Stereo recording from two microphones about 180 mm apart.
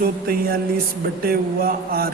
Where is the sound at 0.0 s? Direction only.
55° right (ahead or behind).